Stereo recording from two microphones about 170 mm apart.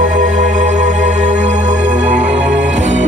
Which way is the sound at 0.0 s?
50° right (ahead or behind).